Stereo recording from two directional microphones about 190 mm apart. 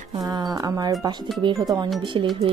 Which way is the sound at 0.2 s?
20° right (ahead or behind).